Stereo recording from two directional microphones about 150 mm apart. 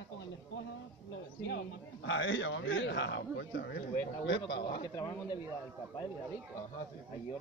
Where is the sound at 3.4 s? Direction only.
90° left.